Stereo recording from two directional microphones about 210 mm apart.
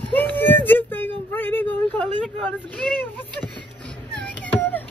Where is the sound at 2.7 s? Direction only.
5° left (ahead or behind).